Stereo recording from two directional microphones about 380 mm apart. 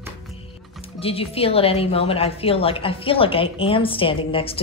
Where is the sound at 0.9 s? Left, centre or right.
Centre.